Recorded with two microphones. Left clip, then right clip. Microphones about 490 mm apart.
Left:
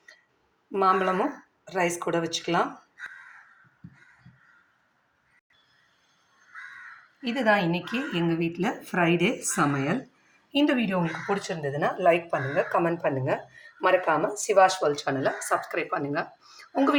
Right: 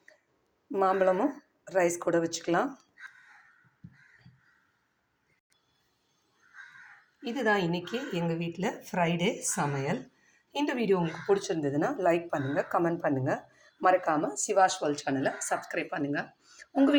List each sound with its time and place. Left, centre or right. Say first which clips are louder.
0.7 s speech: left 2 dB; right
7.3 s speech: left 4 dB; right